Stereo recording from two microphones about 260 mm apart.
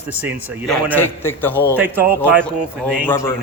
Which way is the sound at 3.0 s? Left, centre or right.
Centre.